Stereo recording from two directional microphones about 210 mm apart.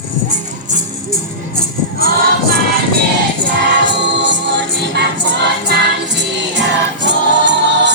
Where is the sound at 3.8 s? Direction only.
55° right (ahead or behind).